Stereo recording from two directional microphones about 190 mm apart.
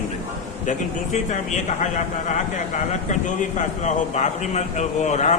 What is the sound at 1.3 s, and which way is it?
A man's voice, 40° left (ahead or behind).